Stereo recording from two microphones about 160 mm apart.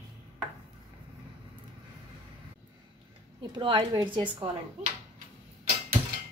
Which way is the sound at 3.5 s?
30° right (ahead or behind).